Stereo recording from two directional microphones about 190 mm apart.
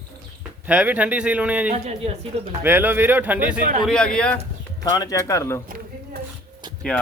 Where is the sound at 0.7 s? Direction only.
5° right (ahead or behind).